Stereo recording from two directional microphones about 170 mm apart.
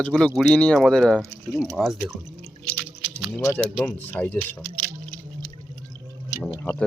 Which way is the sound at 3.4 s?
10° left (ahead or behind).